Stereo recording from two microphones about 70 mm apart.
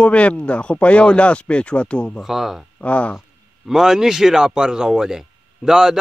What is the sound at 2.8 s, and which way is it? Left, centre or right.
Speech, centre.